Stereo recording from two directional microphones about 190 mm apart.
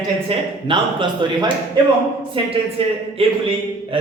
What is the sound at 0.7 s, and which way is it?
A man's voice, 25° right (ahead or behind).